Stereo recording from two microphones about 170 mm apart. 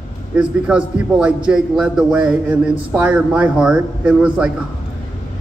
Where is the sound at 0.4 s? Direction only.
5° right (ahead or behind).